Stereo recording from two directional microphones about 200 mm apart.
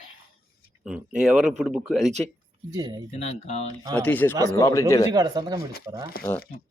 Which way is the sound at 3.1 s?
30° left (ahead or behind).